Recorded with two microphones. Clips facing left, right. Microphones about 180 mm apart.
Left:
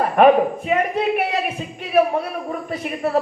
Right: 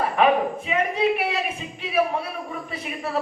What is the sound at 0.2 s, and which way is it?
Speech, 50° left (ahead or behind).